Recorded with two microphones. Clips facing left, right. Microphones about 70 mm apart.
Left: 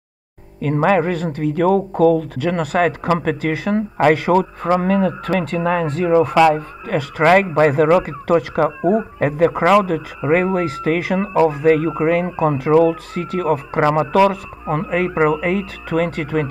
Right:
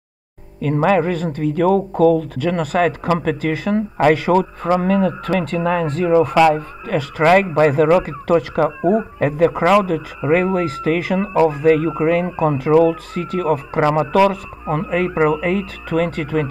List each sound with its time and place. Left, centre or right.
0.6 s speech: left
6.3 s speech: centre
6.9 s speech: left
13.7 s speech: left